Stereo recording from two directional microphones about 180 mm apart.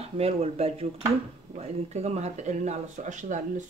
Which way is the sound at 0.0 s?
35° right (ahead or behind).